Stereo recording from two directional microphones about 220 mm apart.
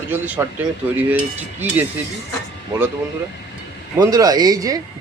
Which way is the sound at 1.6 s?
10° right (ahead or behind).